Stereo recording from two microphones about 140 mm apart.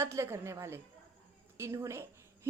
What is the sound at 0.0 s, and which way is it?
A woman's voice, 20° right (ahead or behind).